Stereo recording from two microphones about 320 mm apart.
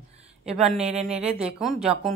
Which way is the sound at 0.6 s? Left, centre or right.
Centre.